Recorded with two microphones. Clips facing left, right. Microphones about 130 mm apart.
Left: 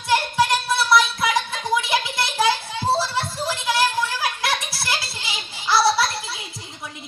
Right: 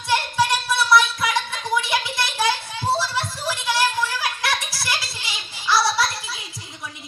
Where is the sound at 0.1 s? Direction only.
25° left (ahead or behind).